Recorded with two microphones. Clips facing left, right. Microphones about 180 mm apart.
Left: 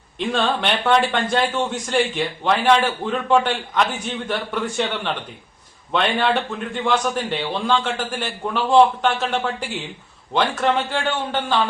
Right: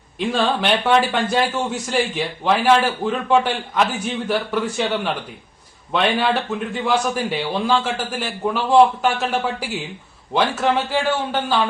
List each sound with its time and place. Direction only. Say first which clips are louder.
0.3 s a man's voice: right 2 dB; centre (ahead or behind)